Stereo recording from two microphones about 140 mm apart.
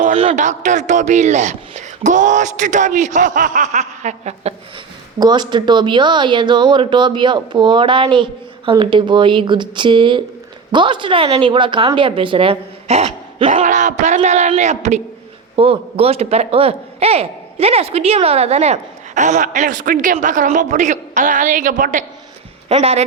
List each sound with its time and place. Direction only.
0.3 s a man's voice: 60° right (ahead or behind)
5.2 s speech: 30° right (ahead or behind); by 15.0 s 55° right (ahead or behind)
15.5 s a man's voice: 40° right (ahead or behind); by 22.0 s 75° right (ahead or behind)
22.7 s speech: 45° right (ahead or behind)